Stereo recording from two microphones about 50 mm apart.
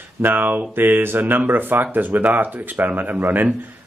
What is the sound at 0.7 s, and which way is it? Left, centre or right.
Speech, right.